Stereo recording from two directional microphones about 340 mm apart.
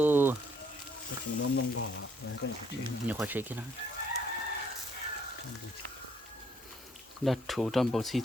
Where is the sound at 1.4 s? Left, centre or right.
Left.